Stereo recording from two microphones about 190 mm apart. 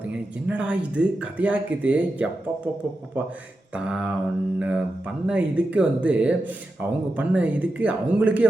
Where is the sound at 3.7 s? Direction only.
5° right (ahead or behind).